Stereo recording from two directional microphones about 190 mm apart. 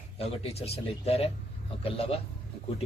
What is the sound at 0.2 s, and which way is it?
A man's voice, 30° left (ahead or behind).